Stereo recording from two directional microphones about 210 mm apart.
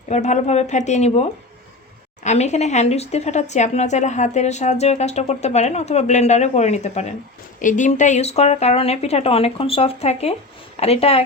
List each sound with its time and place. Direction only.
0.1 s a woman's voice: 35° left (ahead or behind)